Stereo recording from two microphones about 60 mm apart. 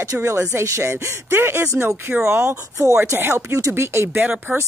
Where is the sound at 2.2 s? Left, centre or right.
Right.